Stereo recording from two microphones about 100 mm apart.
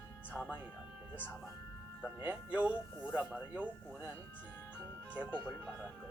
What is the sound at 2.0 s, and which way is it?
Speech, 15° right (ahead or behind).